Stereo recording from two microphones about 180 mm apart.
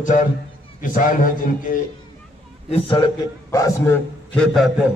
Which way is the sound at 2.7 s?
30° left (ahead or behind).